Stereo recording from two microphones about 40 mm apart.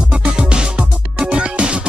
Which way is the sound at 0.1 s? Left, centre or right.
Right.